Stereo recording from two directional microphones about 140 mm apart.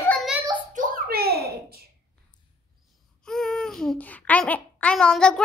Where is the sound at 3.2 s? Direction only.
5° left (ahead or behind).